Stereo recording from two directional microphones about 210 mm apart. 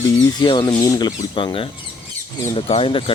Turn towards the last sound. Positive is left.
turn(degrees=25)  # may be behind; listen again after turning